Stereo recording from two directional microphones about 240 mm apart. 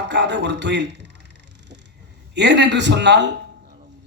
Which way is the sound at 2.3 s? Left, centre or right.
Right.